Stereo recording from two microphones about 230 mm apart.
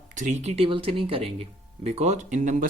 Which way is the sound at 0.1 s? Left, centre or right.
Right.